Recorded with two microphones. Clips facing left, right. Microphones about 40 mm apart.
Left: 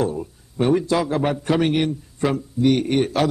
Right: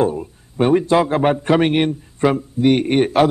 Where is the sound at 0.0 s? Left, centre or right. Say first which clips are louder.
Right 5 dB; right.